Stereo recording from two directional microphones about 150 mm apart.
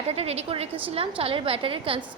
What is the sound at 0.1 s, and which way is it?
A woman's voice, 45° right (ahead or behind).